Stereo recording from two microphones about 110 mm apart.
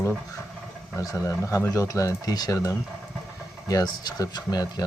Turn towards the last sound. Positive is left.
turn(degrees=35)  # may be behind; listen again after turning